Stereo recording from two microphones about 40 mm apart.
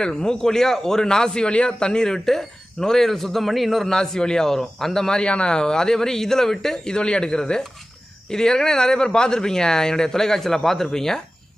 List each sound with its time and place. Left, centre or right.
0.0 s a man's voice: centre
3.8 s a man's voice: centre
5.2 s a man's voice: left